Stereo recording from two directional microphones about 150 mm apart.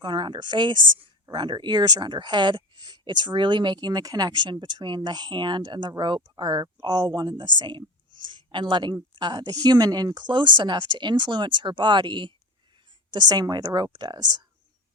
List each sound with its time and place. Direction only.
0.0 s speech: 30° right (ahead or behind)